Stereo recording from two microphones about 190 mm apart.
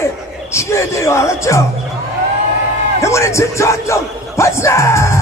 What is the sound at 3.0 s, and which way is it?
Speech, 15° left (ahead or behind).